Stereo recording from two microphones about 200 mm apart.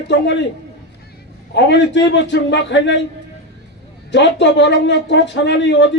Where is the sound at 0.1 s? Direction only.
60° left (ahead or behind).